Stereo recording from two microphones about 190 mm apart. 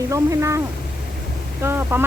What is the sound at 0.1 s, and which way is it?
Speech, 15° right (ahead or behind).